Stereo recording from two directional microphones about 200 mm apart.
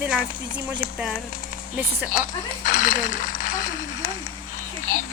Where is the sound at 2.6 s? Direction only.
40° left (ahead or behind).